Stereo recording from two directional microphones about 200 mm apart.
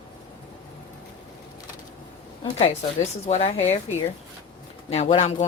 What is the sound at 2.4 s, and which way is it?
Speech, 35° left (ahead or behind).